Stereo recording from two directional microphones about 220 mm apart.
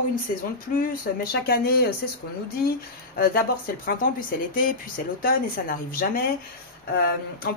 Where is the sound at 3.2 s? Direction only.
40° left (ahead or behind).